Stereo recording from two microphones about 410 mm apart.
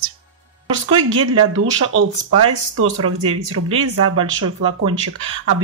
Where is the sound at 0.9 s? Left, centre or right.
Right.